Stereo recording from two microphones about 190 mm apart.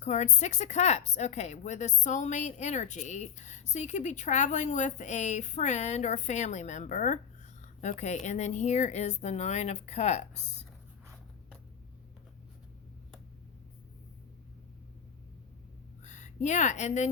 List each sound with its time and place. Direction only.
0.0 s speech: 35° left (ahead or behind)
16.0 s speech: 40° left (ahead or behind)